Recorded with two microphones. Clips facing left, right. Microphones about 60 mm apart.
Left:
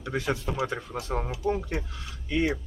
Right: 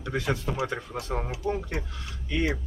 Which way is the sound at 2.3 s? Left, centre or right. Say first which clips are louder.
Left 2 dB; centre.